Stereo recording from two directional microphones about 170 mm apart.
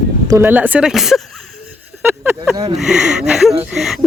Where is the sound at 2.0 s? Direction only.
10° right (ahead or behind).